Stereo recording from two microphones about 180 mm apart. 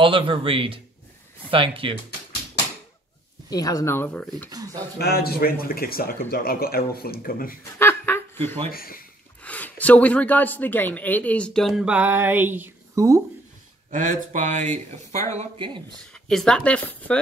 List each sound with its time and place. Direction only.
0.0 s speech: 30° right (ahead or behind)
3.4 s speech: 20° left (ahead or behind)
4.9 s speech: 60° left (ahead or behind)
7.8 s a sound: 10° left (ahead or behind)
8.7 s speech: 55° left (ahead or behind)
9.4 s speech: 10° left (ahead or behind); by 13.2 s 20° right (ahead or behind)
13.8 s speech: 45° right (ahead or behind)
16.1 s speech: 5° left (ahead or behind)